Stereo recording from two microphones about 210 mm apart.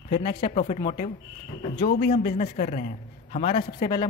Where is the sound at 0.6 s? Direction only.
40° left (ahead or behind).